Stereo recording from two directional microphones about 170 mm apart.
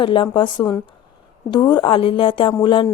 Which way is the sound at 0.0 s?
30° left (ahead or behind).